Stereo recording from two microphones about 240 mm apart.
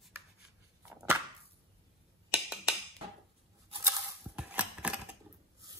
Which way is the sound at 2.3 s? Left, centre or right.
Centre.